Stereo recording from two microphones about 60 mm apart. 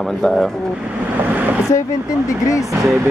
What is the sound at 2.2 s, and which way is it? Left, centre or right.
Speech, left.